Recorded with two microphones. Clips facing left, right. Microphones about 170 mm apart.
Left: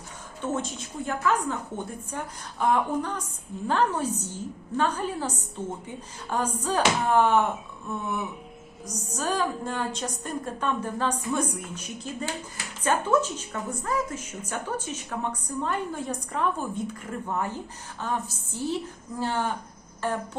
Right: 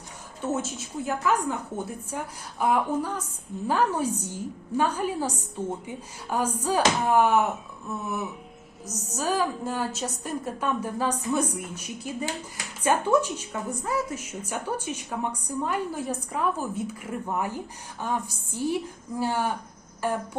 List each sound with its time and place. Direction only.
0.4 s a woman's voice: 5° right (ahead or behind)